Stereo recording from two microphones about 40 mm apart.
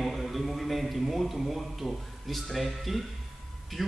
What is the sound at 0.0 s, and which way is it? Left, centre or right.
A man's voice, centre.